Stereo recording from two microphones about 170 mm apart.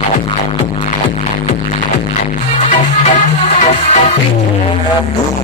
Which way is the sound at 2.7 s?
50° left (ahead or behind).